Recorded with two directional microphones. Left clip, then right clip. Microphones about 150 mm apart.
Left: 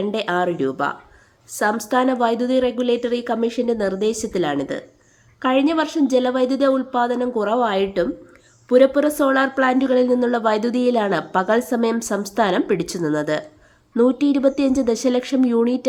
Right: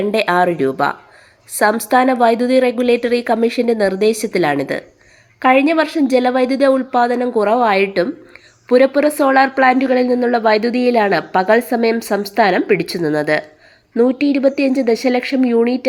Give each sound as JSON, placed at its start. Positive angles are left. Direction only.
{"t": 0.1, "sound": "a woman's voice", "side_deg": -15}